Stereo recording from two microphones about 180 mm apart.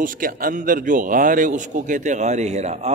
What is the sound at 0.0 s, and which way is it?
A man's voice, 50° right (ahead or behind).